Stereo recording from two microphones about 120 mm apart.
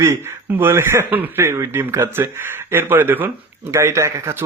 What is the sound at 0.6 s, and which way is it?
Speech, 20° right (ahead or behind).